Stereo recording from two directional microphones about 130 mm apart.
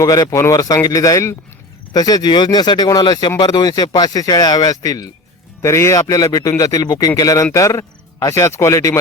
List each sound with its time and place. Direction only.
0.0 s a man's voice: 25° left (ahead or behind)